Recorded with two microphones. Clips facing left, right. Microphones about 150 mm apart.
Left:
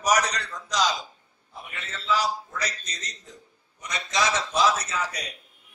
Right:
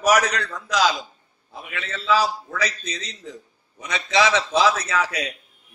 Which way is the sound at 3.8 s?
65° right (ahead or behind).